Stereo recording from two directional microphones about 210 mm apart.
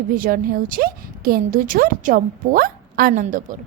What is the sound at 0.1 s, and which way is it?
A woman's voice, 45° right (ahead or behind).